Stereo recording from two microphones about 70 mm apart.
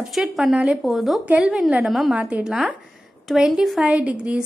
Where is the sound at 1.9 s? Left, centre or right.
Centre.